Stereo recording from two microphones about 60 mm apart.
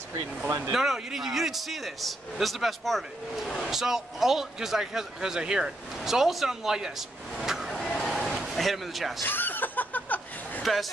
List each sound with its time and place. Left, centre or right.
0.7 s a man's voice: centre
3.7 s speech: centre
7.3 s vehicle: centre
8.0 s a sound: centre
8.5 s a man's voice: centre
9.2 s chuckle: left
10.6 s speech: centre